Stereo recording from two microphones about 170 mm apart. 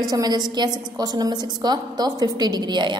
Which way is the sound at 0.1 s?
25° right (ahead or behind).